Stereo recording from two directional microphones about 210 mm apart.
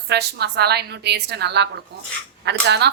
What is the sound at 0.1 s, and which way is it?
A woman's voice, 50° right (ahead or behind).